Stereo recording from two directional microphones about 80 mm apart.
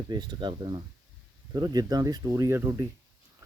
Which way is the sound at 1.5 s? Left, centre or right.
Right.